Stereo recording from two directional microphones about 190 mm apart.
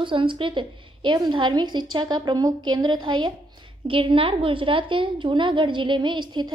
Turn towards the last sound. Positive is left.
turn(degrees=-25)  # may be behind; listen again after turning